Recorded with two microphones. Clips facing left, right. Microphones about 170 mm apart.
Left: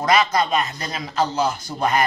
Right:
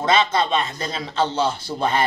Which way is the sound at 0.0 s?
25° right (ahead or behind).